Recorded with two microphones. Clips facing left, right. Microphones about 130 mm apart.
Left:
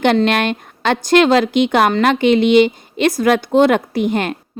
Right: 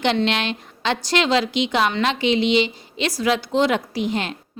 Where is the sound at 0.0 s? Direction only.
50° left (ahead or behind).